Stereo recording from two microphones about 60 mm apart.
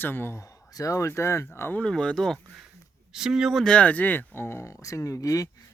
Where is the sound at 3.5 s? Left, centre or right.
Centre.